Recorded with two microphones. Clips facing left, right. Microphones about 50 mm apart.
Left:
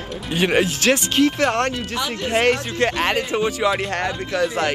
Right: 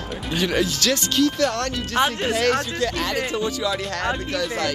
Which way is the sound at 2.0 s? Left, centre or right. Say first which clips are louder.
Right 9 dB; right.